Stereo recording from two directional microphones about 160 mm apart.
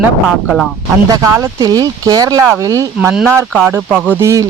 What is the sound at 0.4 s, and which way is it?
Speech, centre (ahead or behind).